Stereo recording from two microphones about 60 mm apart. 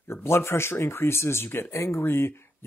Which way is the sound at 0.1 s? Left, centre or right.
Left.